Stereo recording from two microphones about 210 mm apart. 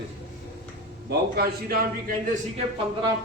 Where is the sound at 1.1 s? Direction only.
45° right (ahead or behind).